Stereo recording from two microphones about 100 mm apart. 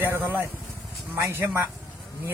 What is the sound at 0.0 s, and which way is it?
Speech, 20° right (ahead or behind).